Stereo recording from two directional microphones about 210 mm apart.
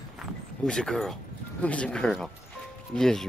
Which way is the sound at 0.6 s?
5° left (ahead or behind).